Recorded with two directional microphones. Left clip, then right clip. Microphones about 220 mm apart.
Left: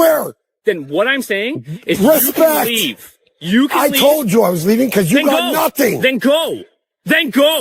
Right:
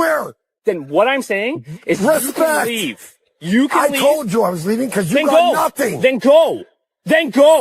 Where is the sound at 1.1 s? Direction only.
40° left (ahead or behind).